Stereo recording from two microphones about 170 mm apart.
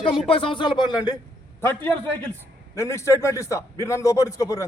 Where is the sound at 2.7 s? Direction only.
15° left (ahead or behind).